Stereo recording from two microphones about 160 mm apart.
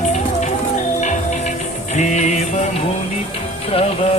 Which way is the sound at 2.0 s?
50° left (ahead or behind).